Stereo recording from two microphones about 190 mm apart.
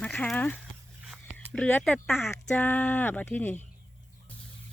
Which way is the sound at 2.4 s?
10° left (ahead or behind).